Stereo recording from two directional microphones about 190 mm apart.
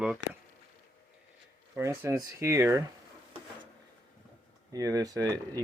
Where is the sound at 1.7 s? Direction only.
10° right (ahead or behind).